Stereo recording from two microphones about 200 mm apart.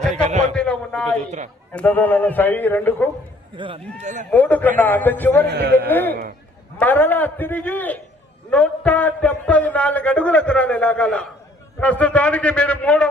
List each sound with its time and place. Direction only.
0.3 s a sound: 35° right (ahead or behind)
0.5 s a sound: 5° left (ahead or behind)
1.2 s speech: 35° right (ahead or behind)
1.7 s a man's voice: 10° left (ahead or behind)
3.5 s a man's voice: 25° right (ahead or behind)
3.9 s speech: 35° right (ahead or behind)
4.3 s a man's voice: 10° left (ahead or behind)
5.5 s a man's voice: 55° right (ahead or behind)
5.9 s a man's voice: 10° left (ahead or behind)